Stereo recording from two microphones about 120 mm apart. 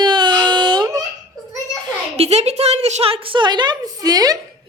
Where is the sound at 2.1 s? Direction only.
60° right (ahead or behind); by 4.3 s 30° right (ahead or behind).